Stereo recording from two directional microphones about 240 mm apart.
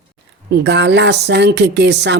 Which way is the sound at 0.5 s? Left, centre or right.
Right.